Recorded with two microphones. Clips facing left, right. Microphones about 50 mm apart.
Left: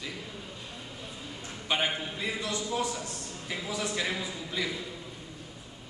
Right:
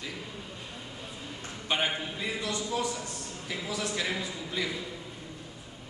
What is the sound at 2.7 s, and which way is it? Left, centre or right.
A man's voice, centre.